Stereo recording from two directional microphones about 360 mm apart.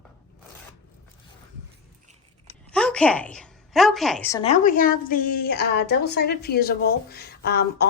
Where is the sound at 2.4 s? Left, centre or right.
Centre; by 7.9 s left.